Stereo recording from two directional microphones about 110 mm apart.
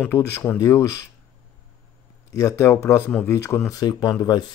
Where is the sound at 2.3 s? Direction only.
30° left (ahead or behind).